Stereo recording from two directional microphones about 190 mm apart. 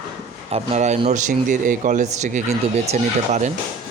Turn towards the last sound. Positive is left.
turn(degrees=-35)  # may be behind; listen again after turning